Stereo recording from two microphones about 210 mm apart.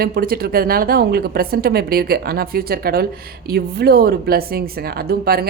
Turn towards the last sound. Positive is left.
turn(degrees=-45)  # may be behind; listen again after turning